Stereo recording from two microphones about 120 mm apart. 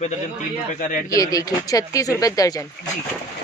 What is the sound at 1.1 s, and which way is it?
Speech, 30° left (ahead or behind).